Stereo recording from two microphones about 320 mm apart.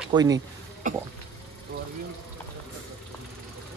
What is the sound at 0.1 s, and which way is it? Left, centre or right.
Speech, centre.